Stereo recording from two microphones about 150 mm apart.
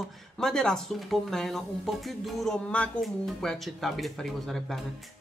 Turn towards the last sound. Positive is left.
turn(degrees=0)  # may be behind; listen again after turning